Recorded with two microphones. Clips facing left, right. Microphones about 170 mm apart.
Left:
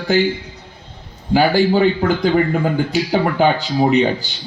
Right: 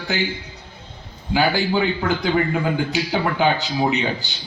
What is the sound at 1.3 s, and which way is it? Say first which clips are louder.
A man's voice: left 6 dB; 45° left (ahead or behind).